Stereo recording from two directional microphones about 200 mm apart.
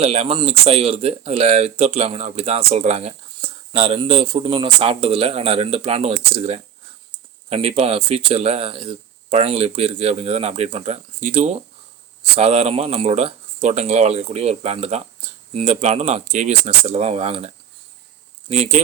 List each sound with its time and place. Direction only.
0.0 s speech: 30° right (ahead or behind)